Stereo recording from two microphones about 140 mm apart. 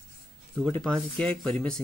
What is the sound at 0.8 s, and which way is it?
Speech, 5° left (ahead or behind).